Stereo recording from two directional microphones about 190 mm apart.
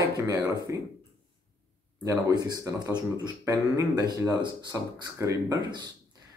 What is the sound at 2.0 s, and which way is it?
Speech, 20° right (ahead or behind).